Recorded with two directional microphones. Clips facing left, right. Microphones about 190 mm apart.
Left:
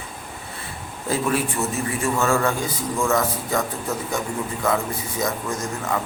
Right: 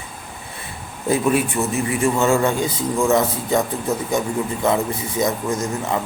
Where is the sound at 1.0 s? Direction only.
20° right (ahead or behind).